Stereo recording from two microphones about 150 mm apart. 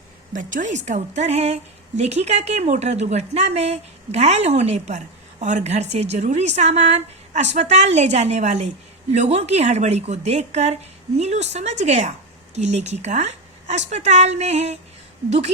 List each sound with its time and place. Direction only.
0.3 s a woman's voice: 60° right (ahead or behind)